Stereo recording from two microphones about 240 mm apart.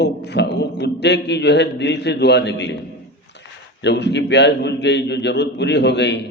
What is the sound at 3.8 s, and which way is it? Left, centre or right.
A man's voice, left.